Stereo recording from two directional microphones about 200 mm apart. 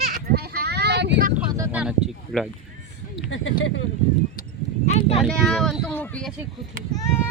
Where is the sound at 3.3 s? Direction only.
75° left (ahead or behind).